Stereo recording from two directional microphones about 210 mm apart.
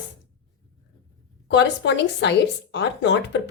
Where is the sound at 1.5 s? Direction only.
60° left (ahead or behind).